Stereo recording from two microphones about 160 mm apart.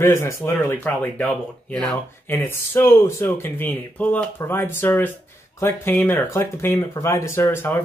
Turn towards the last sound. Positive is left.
turn(degrees=15)  # may be behind; listen again after turning